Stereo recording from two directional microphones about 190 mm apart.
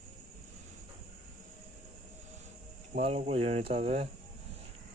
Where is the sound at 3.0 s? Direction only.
30° right (ahead or behind).